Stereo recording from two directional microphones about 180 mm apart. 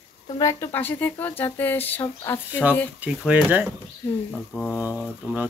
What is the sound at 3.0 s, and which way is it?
Speech, 10° right (ahead or behind).